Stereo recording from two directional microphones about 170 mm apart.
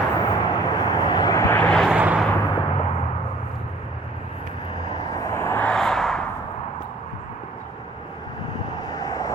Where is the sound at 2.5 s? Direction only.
25° left (ahead or behind).